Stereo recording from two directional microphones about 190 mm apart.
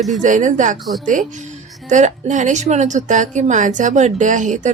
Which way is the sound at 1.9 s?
40° right (ahead or behind).